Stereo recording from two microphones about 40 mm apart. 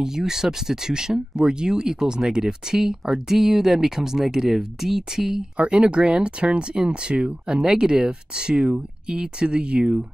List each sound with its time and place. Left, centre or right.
0.0 s speech: centre
5.7 s speech: right